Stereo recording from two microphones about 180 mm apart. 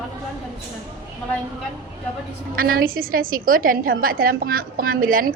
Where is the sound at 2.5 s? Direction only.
55° right (ahead or behind).